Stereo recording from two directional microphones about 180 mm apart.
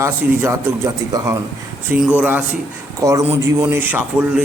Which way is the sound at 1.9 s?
5° right (ahead or behind).